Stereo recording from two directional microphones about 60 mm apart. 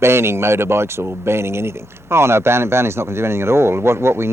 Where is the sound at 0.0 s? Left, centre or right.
Right.